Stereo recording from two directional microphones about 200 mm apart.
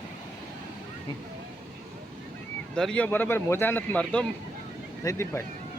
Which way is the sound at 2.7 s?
5° left (ahead or behind).